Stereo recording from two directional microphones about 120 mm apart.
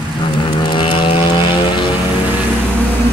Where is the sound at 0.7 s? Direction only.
40° left (ahead or behind).